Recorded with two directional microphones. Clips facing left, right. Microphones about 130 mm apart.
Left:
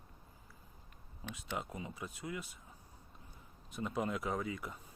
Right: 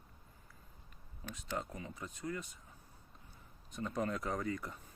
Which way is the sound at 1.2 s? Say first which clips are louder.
Right 1 dB; 20° left (ahead or behind).